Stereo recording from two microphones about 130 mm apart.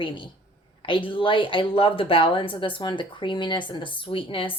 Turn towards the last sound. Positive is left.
turn(degrees=40)  # may be behind; listen again after turning